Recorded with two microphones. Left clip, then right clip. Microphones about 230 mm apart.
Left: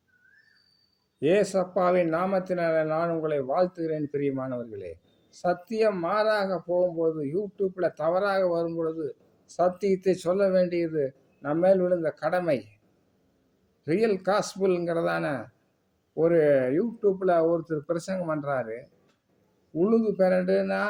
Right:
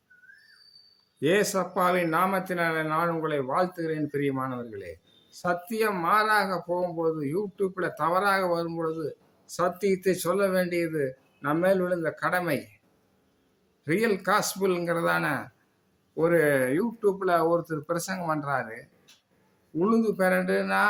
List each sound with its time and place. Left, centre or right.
1.2 s speech: centre
13.8 s speech: centre